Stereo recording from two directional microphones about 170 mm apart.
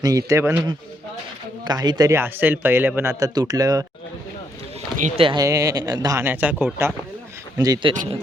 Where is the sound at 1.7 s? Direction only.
25° right (ahead or behind).